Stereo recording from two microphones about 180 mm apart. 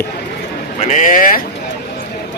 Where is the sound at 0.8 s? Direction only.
45° left (ahead or behind).